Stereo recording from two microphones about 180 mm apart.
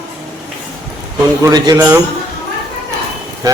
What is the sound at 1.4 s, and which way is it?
Speech, 20° right (ahead or behind).